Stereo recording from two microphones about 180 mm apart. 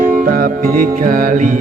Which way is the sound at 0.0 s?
50° right (ahead or behind).